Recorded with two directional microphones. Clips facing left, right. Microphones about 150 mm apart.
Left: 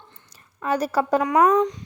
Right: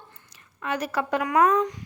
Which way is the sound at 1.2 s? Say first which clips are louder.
Left 1 dB; 20° left (ahead or behind).